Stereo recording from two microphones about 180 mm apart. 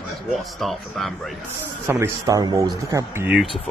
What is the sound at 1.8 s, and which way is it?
Speech, 15° right (ahead or behind).